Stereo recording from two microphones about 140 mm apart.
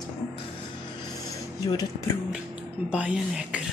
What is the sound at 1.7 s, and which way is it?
Speech, 25° left (ahead or behind).